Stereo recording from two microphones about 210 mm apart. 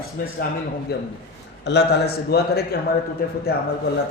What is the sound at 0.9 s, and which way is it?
A man's voice, 50° left (ahead or behind).